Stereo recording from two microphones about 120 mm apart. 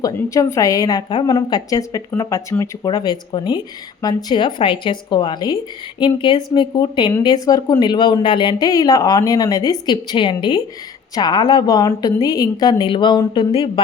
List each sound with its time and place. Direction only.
0.0 s a woman's voice: 30° left (ahead or behind)
2.8 s speech: 35° left (ahead or behind)